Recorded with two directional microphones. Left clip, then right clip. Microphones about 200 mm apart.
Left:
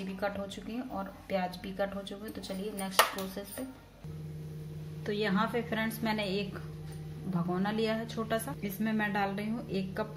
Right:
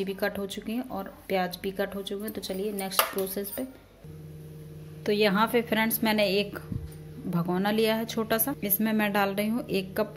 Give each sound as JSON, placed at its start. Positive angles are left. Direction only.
{"t": 0.0, "sound": "speech", "side_deg": -45}
{"t": 5.0, "sound": "speech", "side_deg": -45}